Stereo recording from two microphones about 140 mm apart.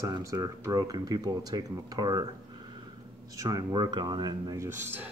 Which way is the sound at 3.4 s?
25° right (ahead or behind).